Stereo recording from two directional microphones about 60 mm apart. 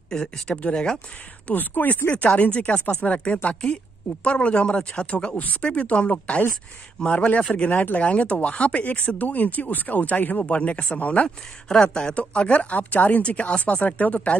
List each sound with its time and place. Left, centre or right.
0.1 s speech: centre
1.5 s speech: left
11.2 s speech: centre